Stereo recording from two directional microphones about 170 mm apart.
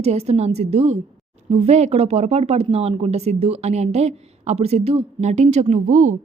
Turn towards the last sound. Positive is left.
turn(degrees=-45)  # may be behind; listen again after turning